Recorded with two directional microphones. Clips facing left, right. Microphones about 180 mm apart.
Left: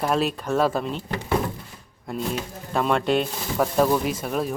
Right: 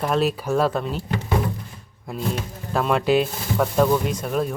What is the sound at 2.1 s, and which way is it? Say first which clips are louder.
Speech: right 1 dB; centre (ahead or behind).